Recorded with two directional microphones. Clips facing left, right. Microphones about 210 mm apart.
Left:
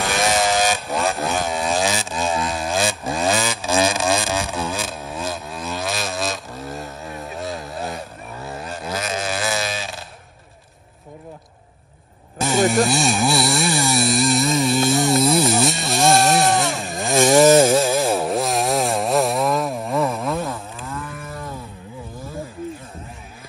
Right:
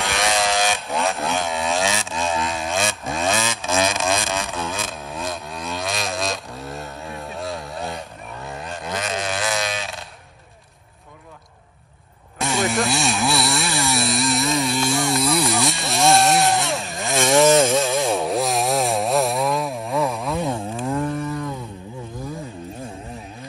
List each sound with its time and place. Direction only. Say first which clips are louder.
0.0 s vehicle: left 2 dB; centre (ahead or behind)
12.4 s a sound: left 4 dB; centre (ahead or behind)
20.4 s chainsaw: right 6 dB; 30° right (ahead or behind)